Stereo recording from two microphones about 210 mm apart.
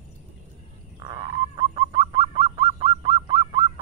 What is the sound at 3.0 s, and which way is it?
Goose, 25° right (ahead or behind).